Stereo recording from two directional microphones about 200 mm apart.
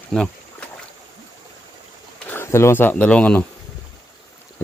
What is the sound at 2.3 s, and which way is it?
Speech, 10° left (ahead or behind).